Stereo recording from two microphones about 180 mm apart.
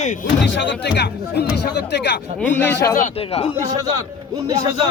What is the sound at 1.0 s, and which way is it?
A man's voice, 65° left (ahead or behind).